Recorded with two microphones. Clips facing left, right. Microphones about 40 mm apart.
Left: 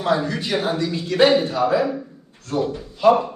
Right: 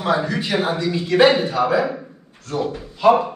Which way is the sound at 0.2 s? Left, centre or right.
Right.